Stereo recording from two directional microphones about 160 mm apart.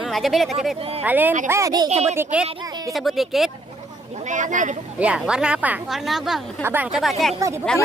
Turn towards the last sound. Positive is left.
turn(degrees=5)  # may be behind; listen again after turning